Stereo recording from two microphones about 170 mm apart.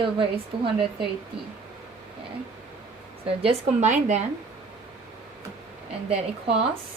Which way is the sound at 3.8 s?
45° right (ahead or behind).